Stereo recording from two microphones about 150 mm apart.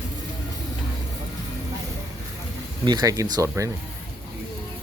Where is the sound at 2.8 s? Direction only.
30° right (ahead or behind).